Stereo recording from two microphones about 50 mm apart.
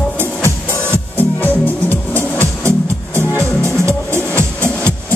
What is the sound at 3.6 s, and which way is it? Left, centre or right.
Music, right.